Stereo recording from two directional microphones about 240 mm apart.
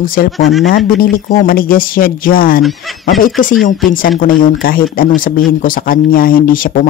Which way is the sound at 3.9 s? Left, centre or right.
Left.